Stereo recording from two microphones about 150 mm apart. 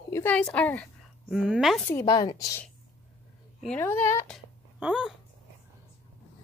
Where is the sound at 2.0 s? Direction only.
25° left (ahead or behind).